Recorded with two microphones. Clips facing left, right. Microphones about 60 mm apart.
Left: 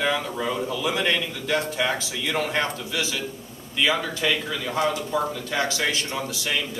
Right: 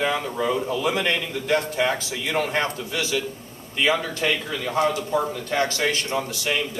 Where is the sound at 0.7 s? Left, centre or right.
Right.